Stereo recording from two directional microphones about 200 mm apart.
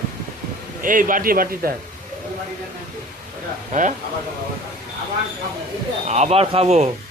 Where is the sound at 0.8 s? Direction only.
45° right (ahead or behind).